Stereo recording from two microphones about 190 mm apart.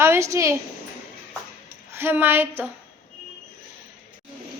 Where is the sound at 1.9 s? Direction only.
10° right (ahead or behind).